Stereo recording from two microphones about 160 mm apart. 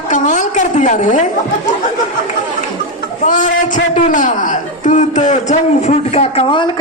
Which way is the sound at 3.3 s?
50° left (ahead or behind).